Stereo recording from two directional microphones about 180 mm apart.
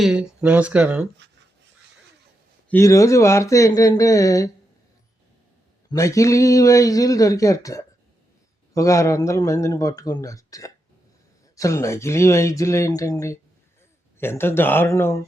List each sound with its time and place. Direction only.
0.0 s speech: 5° right (ahead or behind)
2.6 s speech: 15° left (ahead or behind)
5.9 s speech: 15° left (ahead or behind)